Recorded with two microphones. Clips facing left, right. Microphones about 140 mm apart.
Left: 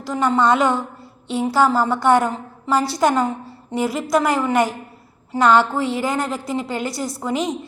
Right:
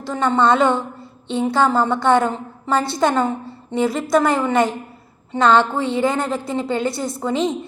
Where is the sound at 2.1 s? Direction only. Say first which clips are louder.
Right 1 dB; 25° right (ahead or behind).